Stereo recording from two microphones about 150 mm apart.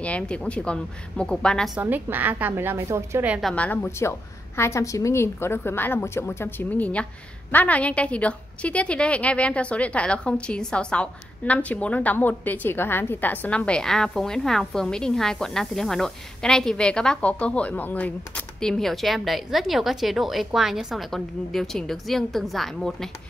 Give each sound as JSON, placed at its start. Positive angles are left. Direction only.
{"t": 0.0, "sound": "a woman's voice", "side_deg": 10}
{"t": 1.8, "sound": "a woman's voice", "side_deg": -10}
{"t": 3.3, "sound": "a woman's voice", "side_deg": 5}